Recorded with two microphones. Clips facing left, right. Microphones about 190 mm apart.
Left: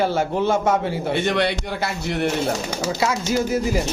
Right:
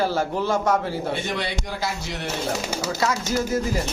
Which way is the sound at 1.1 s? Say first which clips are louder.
Left 7 dB; 70° left (ahead or behind).